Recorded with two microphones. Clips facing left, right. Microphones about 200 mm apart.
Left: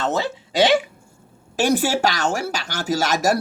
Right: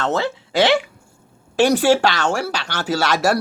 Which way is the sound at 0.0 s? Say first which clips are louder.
Right 2 dB; 40° left (ahead or behind).